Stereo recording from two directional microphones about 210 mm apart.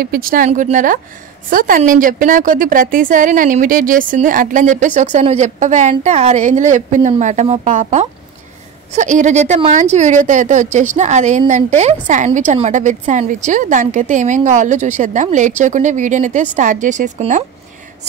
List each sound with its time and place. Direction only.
0.0 s speech: 45° right (ahead or behind)